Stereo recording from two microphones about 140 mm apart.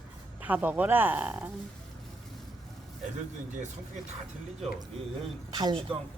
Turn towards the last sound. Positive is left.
turn(degrees=-40)  # may be behind; listen again after turning